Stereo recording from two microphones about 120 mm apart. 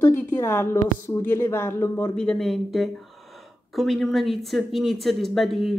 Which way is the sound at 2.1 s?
5° left (ahead or behind).